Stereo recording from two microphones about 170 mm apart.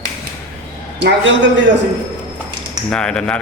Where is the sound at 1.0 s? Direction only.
90° right.